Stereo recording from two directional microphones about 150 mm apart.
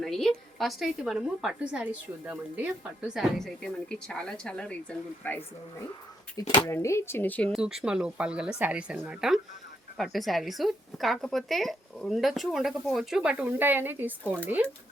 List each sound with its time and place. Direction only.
0.0 s a woman's voice: centre (ahead or behind)
3.1 s a woman's voice: centre (ahead or behind)
6.4 s speech: 40° left (ahead or behind)
6.7 s speech: 20° left (ahead or behind)
7.5 s a woman's voice: 5° right (ahead or behind)